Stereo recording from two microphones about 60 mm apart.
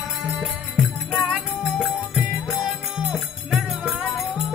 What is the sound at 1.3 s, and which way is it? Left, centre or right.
Music, centre.